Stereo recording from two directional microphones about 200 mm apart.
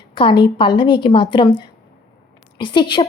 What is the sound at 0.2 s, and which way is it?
A woman's voice, 25° left (ahead or behind).